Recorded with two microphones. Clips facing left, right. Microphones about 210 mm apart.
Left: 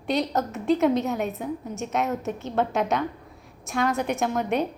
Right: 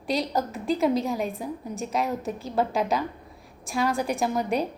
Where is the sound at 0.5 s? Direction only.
30° right (ahead or behind).